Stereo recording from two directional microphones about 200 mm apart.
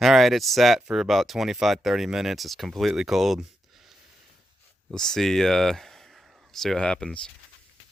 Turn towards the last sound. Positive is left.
turn(degrees=5)  # may be behind; listen again after turning